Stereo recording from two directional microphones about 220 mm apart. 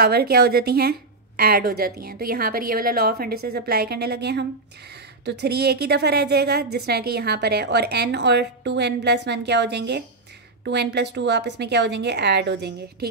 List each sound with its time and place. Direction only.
0.0 s a woman's voice: 45° right (ahead or behind)